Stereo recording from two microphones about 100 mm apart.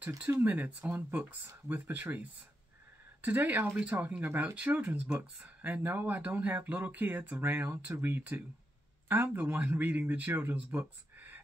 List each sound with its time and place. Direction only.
0.2 s speech: 20° right (ahead or behind)